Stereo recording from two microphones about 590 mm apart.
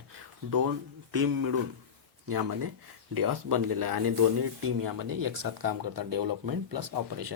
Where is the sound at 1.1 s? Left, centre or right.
Right.